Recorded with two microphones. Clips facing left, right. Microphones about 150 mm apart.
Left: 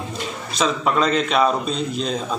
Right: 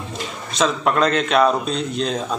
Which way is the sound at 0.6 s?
Centre (ahead or behind).